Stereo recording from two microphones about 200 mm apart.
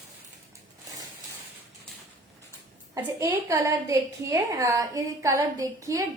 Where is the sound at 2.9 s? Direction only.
15° right (ahead or behind).